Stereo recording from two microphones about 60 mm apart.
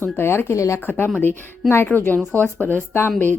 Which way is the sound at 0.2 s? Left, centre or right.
Left.